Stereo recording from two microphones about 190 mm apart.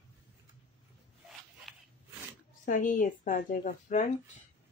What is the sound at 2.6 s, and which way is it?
A woman's voice, 45° left (ahead or behind).